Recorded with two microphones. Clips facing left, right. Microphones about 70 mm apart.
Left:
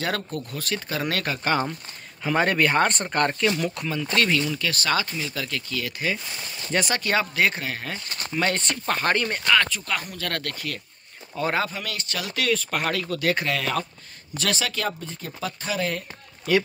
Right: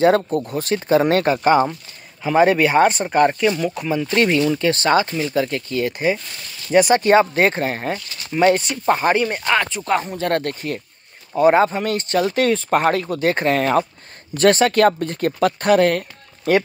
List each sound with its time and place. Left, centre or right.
0.0 s speech: right
1.5 s speech: centre
3.9 s speech: right
6.7 s speech: centre
7.0 s speech: right
8.3 s speech: centre
11.6 s speech: right
16.5 s speech: right